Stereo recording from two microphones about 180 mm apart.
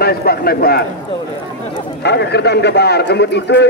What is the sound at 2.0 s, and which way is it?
A man's voice, 70° left (ahead or behind).